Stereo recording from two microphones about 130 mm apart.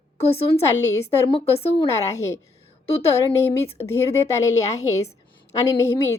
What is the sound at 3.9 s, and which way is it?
A woman's voice, 20° left (ahead or behind).